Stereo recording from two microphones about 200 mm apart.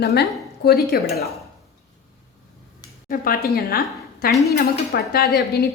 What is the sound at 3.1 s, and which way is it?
A woman's voice, 50° left (ahead or behind).